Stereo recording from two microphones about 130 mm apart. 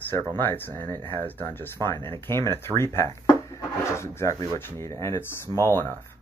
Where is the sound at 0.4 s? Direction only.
15° left (ahead or behind).